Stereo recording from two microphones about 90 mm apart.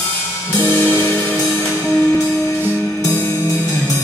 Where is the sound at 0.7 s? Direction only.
20° left (ahead or behind).